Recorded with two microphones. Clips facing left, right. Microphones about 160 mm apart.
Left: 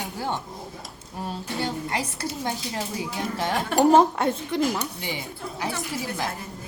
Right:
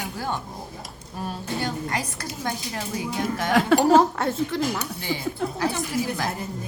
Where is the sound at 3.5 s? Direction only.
90° right.